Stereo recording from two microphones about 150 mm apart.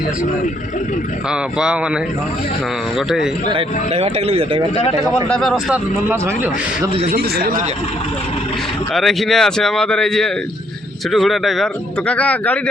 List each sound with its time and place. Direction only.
1.3 s speech: 5° right (ahead or behind)
3.5 s speech: 40° right (ahead or behind)
5.0 s speech: centre (ahead or behind)
6.1 s speech: 15° right (ahead or behind)
7.1 s a man's voice: 90° right
8.9 s speech: centre (ahead or behind)